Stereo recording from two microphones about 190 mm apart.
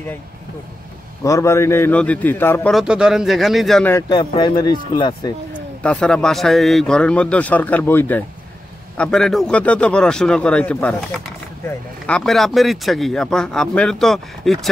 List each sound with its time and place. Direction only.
1.2 s a man's voice: 15° left (ahead or behind)
2.7 s speech: 5° right (ahead or behind)
3.9 s speech: 25° left (ahead or behind)
5.8 s a man's voice: 5° left (ahead or behind)